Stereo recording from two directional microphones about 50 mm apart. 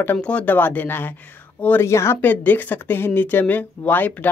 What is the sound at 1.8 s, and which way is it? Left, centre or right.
Speech, left.